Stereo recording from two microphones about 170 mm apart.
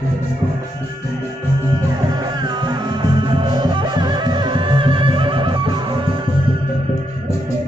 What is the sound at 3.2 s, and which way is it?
Music, 30° right (ahead or behind).